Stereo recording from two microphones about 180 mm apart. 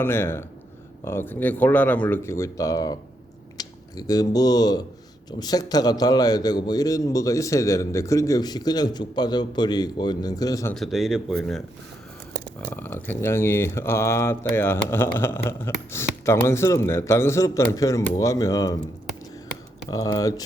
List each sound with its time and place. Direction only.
0.0 s a man's voice: 15° left (ahead or behind)
10.8 s speech: centre (ahead or behind); by 18.8 s 20° left (ahead or behind)
19.9 s a man's voice: 20° left (ahead or behind)